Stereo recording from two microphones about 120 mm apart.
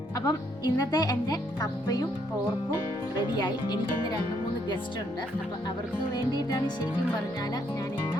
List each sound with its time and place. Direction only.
0.3 s speech: 35° left (ahead or behind)
3.3 s speech: 35° left (ahead or behind)
6.0 s speech: 40° left (ahead or behind)